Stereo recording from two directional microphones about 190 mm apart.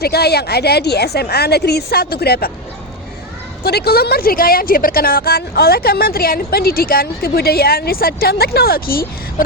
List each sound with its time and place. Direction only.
0.0 s a woman's voice: 55° left (ahead or behind)
3.6 s a woman's voice: 55° left (ahead or behind)